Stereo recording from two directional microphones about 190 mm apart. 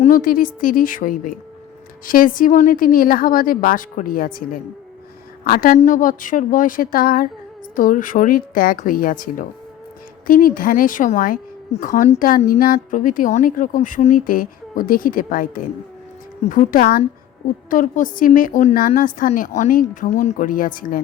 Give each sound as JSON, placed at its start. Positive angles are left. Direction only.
{"t": 0.0, "sound": "a woman's voice", "side_deg": 45}